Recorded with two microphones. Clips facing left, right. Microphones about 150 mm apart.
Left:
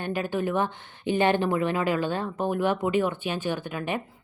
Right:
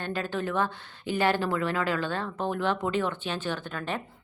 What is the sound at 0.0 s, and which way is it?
Speech, 15° left (ahead or behind).